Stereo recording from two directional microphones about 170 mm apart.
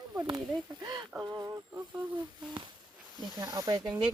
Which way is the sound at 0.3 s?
25° right (ahead or behind).